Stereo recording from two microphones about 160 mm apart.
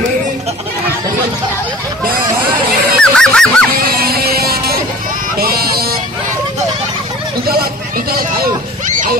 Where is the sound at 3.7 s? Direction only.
70° right (ahead or behind).